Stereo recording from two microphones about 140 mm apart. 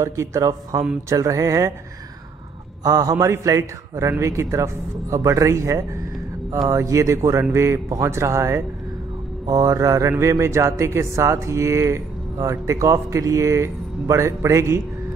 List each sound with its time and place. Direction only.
0.0 s a man's voice: 20° right (ahead or behind)
2.8 s a man's voice: 25° right (ahead or behind)